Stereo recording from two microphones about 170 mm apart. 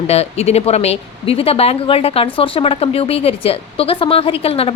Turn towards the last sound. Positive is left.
turn(degrees=35)  # may be behind; listen again after turning